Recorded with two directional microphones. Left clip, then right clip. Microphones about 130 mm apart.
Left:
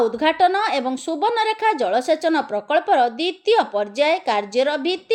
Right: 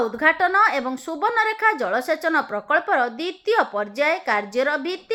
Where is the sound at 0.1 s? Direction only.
20° left (ahead or behind).